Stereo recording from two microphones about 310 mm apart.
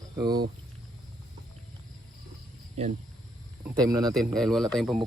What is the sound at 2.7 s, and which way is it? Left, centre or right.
Speech, right.